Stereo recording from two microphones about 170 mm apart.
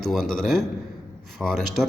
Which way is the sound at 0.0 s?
Centre (ahead or behind).